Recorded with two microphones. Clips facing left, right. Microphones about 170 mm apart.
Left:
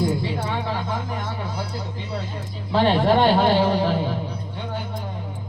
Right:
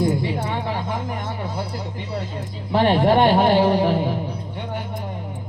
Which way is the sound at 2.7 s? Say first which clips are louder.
Right 2 dB; 20° right (ahead or behind).